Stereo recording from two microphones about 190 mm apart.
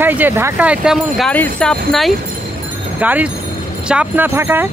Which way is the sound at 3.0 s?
10° right (ahead or behind).